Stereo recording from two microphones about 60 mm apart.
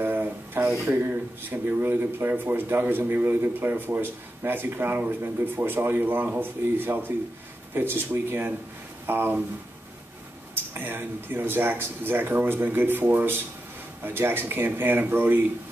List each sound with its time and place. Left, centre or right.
0.0 s a sound: right
0.8 s speech: right
10.5 s speech: right